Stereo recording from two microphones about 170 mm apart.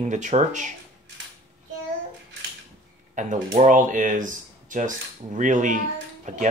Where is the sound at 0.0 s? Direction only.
45° right (ahead or behind).